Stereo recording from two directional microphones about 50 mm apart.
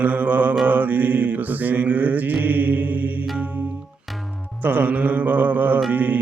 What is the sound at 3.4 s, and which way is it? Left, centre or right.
Music, right.